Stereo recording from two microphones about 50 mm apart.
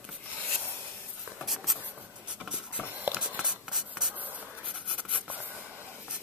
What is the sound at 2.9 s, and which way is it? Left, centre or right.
Writing, right.